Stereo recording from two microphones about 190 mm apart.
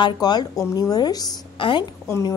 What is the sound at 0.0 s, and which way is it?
A woman's voice, 20° left (ahead or behind).